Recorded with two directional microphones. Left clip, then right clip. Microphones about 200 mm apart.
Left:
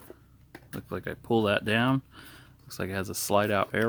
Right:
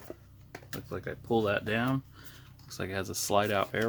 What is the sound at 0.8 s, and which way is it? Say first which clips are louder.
Speech: left 3 dB; 40° left (ahead or behind).